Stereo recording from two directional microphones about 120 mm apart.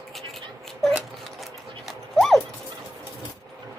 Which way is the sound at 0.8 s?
Centre (ahead or behind).